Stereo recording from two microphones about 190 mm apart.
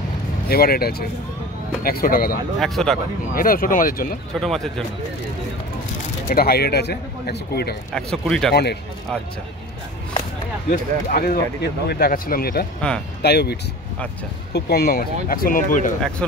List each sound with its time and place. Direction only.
0.5 s speech: 55° left (ahead or behind)
2.6 s speech: centre (ahead or behind)
3.3 s speech: 50° left (ahead or behind)
4.4 s speech: centre (ahead or behind)
6.2 s speech: 55° left (ahead or behind)
7.9 s speech: 5° left (ahead or behind)
10.7 s speech: 50° left (ahead or behind)
16.2 s speech: 5° left (ahead or behind)